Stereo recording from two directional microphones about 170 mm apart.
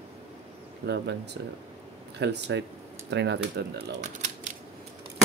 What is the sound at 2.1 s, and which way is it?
Speech, 90° right.